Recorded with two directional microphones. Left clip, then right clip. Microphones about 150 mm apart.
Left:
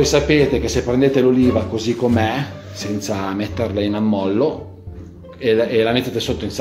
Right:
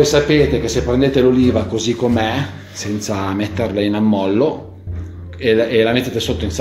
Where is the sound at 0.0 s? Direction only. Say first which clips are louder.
Right 2 dB; 10° left (ahead or behind).